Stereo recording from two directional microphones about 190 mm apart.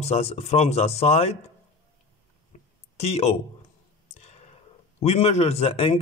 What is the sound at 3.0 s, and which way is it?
Speech, 35° left (ahead or behind).